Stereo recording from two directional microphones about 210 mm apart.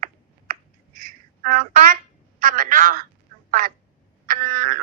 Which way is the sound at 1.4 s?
40° right (ahead or behind).